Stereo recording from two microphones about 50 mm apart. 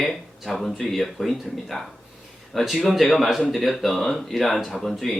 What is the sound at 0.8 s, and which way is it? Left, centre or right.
Speech, centre.